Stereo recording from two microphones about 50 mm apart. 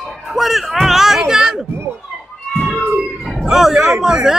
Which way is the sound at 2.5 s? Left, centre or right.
Centre.